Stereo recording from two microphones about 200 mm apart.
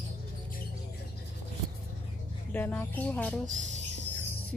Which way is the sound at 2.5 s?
10° left (ahead or behind).